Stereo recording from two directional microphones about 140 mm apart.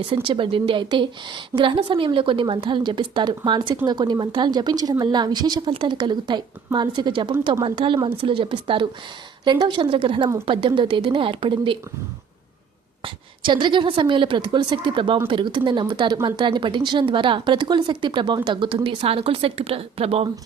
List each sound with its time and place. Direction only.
0.1 s speech: 35° right (ahead or behind)
13.4 s speech: 35° right (ahead or behind)